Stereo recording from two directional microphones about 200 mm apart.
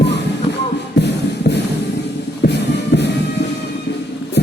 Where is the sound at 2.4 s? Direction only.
60° left (ahead or behind).